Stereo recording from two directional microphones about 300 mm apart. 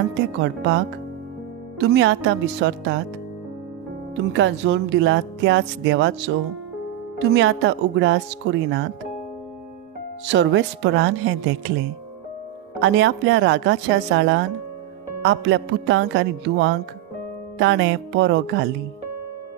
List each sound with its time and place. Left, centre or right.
0.1 s speech: right
1.8 s speech: right
4.1 s speech: right
10.2 s speech: right
12.8 s speech: right